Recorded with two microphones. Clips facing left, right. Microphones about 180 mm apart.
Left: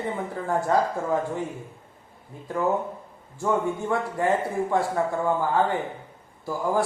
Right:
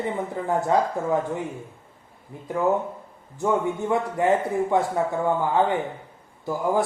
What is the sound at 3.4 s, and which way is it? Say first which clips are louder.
Speech: right 1 dB; 20° right (ahead or behind).